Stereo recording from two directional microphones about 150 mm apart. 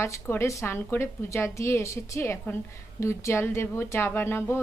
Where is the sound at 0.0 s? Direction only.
15° left (ahead or behind).